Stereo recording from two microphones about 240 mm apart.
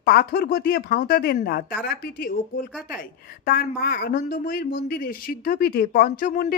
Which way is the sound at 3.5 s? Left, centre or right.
Left.